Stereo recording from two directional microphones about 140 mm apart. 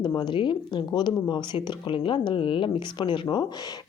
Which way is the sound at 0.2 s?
35° left (ahead or behind).